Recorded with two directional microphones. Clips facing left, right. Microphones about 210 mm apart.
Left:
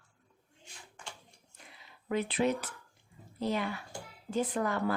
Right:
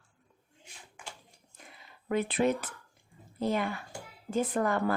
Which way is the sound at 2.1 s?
50° right (ahead or behind).